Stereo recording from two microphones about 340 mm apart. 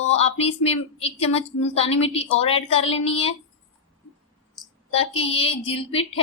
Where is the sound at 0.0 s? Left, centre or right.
Centre.